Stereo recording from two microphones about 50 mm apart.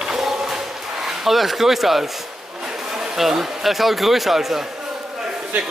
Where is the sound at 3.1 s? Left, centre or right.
Centre.